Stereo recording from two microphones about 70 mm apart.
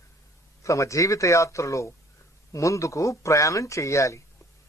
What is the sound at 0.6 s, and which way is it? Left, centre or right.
A man's voice, left.